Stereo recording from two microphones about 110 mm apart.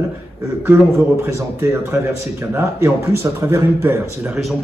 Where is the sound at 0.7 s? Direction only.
25° right (ahead or behind).